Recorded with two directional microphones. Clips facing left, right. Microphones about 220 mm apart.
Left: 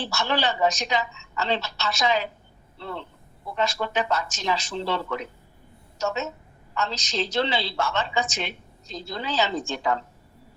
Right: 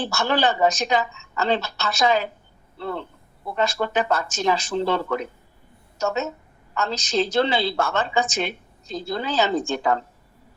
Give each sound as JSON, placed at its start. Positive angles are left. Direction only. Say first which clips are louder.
{"t": 0.0, "sound": "a woman's voice", "louder": "right 4 dB", "side_deg": -50}